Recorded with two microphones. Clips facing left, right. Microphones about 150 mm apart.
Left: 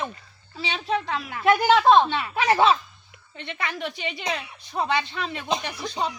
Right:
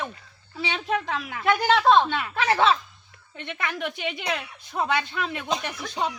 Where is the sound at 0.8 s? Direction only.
5° right (ahead or behind); by 2.7 s 15° left (ahead or behind).